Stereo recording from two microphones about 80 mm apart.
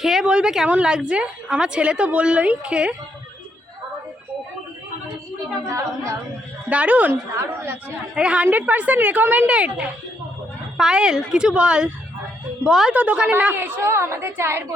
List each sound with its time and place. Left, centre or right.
0.0 s a sound: centre
0.7 s a woman's voice: centre
6.7 s a woman's voice: centre
7.3 s speech: right
8.1 s a woman's voice: centre
12.9 s a woman's voice: centre